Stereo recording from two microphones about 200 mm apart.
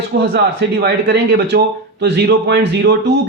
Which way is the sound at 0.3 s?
55° right (ahead or behind).